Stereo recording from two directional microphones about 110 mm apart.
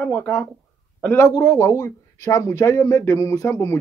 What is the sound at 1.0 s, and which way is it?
Speech, 25° left (ahead or behind).